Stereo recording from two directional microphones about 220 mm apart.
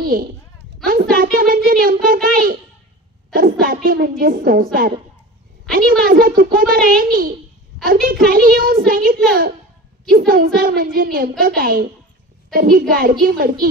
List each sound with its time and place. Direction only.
0.0 s a child's voice: 40° right (ahead or behind)
5.7 s a woman's voice: 40° right (ahead or behind)